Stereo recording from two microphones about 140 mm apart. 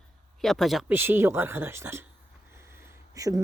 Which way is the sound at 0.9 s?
15° right (ahead or behind).